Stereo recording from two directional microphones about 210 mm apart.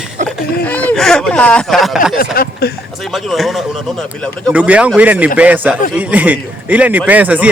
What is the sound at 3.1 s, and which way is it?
A man's voice, centre (ahead or behind).